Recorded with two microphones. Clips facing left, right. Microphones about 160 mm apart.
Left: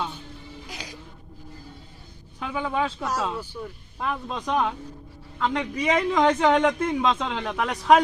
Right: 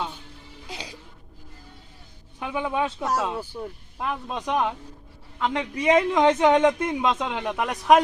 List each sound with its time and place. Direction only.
0.7 s a sound: 30° right (ahead or behind)
2.4 s speech: 10° right (ahead or behind)
3.9 s speech: 10° right (ahead or behind)